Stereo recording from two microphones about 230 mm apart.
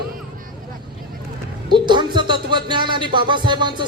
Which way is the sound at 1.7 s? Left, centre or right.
Centre.